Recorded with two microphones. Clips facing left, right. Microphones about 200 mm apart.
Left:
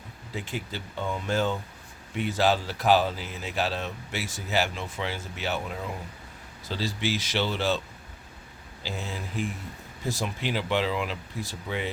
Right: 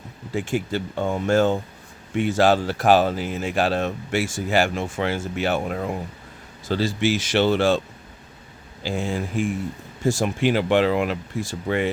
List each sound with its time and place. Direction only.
0.3 s speech: 50° right (ahead or behind)
8.8 s speech: 50° right (ahead or behind)